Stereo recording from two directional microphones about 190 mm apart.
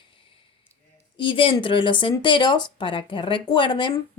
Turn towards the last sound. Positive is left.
turn(degrees=25)  # may be behind; listen again after turning